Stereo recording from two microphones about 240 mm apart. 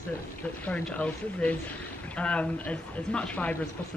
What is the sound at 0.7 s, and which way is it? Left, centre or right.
A woman's voice, centre.